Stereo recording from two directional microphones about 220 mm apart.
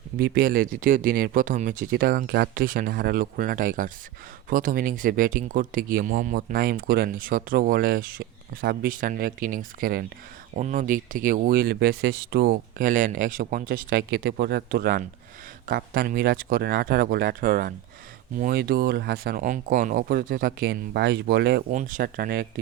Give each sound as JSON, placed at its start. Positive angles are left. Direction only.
{"t": 0.2, "sound": "speech", "side_deg": -40}